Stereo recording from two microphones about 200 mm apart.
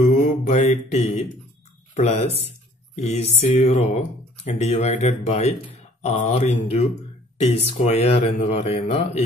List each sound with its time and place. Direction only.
0.0 s mantra: 35° left (ahead or behind)
2.0 s speech: 35° left (ahead or behind)